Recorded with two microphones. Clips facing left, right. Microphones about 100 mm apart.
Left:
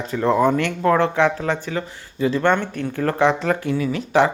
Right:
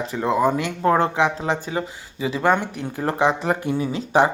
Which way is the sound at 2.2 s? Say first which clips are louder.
Left 2 dB; 5° right (ahead or behind).